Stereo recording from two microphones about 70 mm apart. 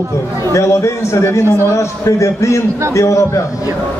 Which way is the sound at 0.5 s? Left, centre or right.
Left.